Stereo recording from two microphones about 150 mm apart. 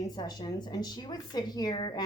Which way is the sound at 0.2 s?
25° left (ahead or behind).